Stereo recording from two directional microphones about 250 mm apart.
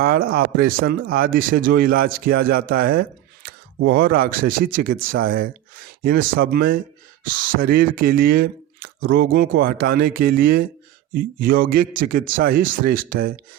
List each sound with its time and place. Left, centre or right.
0.0 s speech: right